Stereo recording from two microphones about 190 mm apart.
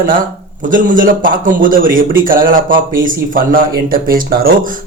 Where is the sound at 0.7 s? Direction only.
45° right (ahead or behind).